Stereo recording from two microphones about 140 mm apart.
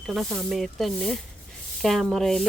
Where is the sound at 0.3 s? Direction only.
Centre (ahead or behind).